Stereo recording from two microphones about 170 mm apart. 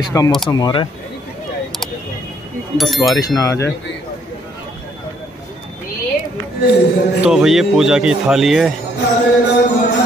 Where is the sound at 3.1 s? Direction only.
20° left (ahead or behind).